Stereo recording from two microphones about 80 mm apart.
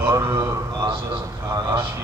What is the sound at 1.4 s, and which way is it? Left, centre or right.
Speech, right.